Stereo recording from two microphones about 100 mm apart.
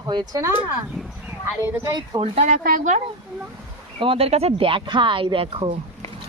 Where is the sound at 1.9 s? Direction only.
60° right (ahead or behind).